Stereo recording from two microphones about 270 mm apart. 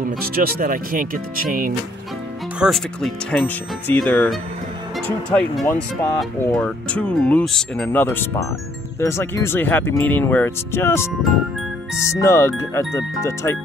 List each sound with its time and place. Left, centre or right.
0.0 s speech: right
2.6 s speech: centre